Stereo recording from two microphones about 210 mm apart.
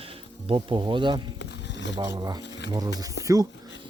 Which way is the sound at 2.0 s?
20° right (ahead or behind).